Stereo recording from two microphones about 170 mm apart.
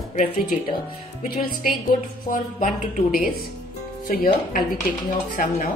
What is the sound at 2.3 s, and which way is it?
Speech, 50° left (ahead or behind).